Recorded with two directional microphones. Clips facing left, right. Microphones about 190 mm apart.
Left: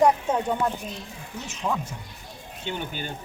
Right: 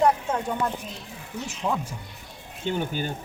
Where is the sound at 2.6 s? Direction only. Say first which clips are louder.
Right 5 dB; 40° right (ahead or behind).